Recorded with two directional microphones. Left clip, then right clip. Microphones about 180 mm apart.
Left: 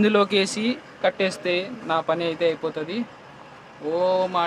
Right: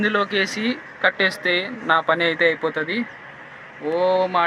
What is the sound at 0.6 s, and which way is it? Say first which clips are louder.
Speech: right 3 dB; 10° left (ahead or behind).